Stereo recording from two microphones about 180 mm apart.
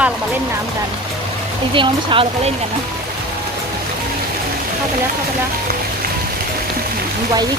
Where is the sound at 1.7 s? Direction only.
30° right (ahead or behind).